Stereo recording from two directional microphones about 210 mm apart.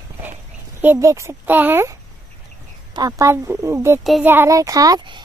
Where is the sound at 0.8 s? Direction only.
10° right (ahead or behind).